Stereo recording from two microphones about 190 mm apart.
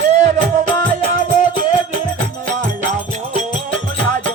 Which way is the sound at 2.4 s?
40° right (ahead or behind).